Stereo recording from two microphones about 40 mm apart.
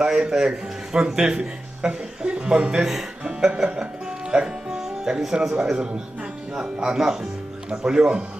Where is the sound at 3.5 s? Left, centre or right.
Right.